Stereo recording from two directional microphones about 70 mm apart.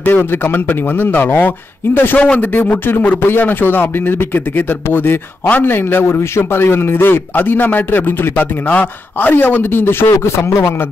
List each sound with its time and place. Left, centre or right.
0.0 s a man's voice: left